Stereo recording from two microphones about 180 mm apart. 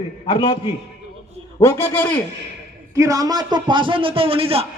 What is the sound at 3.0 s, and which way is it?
A man's voice, 20° right (ahead or behind).